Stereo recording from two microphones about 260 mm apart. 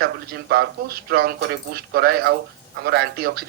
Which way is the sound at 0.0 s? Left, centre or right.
Right.